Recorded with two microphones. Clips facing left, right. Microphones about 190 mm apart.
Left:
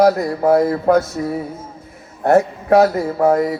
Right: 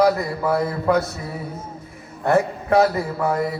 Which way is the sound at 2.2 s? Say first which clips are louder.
Left 5 dB; 55° left (ahead or behind).